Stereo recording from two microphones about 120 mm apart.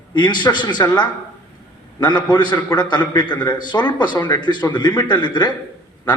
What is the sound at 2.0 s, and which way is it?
A man's voice, 40° left (ahead or behind).